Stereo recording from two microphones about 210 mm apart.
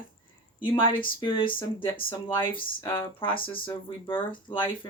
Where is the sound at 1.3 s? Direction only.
25° left (ahead or behind).